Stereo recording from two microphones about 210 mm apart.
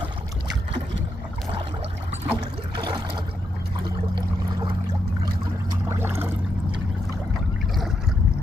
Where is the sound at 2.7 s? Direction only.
20° right (ahead or behind).